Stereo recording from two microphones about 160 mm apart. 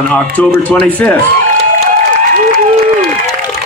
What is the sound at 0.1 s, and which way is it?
Speech, 10° left (ahead or behind).